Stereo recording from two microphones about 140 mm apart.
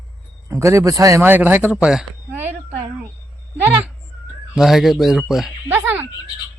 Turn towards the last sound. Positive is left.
turn(degrees=-15)  # may be behind; listen again after turning